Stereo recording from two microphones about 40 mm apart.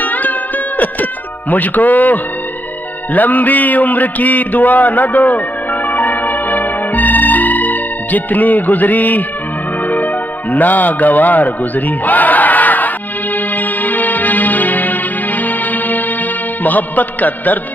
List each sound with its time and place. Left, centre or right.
0.0 s music: left
1.5 s music: left
10.5 s speech: left
13.6 s music: left